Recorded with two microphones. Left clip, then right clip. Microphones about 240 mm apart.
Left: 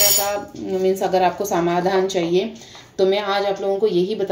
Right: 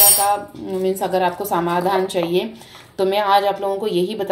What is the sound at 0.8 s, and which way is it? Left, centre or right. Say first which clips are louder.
A woman's voice: left 1 dB; centre.